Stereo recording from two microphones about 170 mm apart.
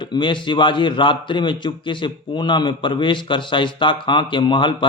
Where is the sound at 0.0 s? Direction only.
25° left (ahead or behind).